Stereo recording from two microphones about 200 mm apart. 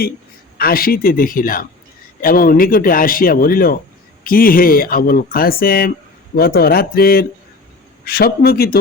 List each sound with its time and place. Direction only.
0.6 s speech: 50° left (ahead or behind)